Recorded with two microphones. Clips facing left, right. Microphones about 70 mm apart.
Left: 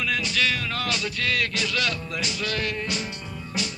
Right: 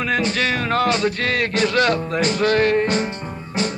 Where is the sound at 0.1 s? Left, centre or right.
Right.